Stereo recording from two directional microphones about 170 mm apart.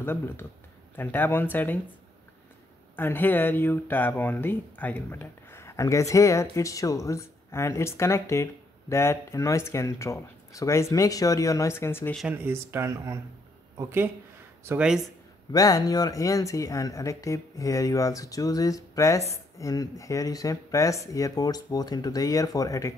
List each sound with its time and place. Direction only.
0.0 s speech: 10° left (ahead or behind)
3.0 s speech: 10° left (ahead or behind)
12.2 s speech: 10° right (ahead or behind)
15.5 s speech: 20° left (ahead or behind)